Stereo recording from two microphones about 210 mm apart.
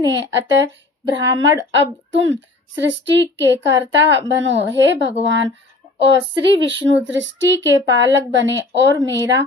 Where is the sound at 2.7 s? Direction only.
60° right (ahead or behind).